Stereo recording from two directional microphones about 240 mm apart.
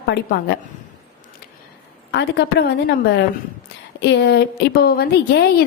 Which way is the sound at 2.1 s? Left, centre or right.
Left.